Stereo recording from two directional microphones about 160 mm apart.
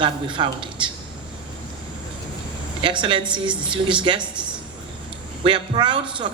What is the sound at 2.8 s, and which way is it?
Speech, 30° right (ahead or behind).